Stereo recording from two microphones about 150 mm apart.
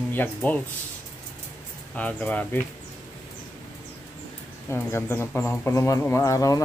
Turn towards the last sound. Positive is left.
turn(degrees=20)  # may be behind; listen again after turning